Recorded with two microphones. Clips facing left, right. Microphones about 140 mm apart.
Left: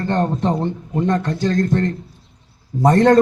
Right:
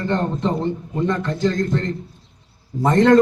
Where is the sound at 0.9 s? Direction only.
40° left (ahead or behind).